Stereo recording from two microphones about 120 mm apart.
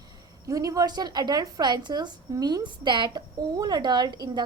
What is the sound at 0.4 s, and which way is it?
A woman's voice, 30° right (ahead or behind).